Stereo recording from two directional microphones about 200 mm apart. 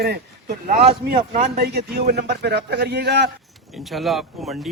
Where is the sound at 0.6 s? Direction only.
40° right (ahead or behind).